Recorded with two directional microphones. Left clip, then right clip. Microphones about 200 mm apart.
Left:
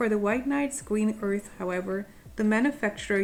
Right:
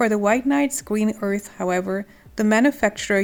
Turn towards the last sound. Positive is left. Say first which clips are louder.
# right 7 dB
turn(degrees=-45)  # may be behind; listen again after turning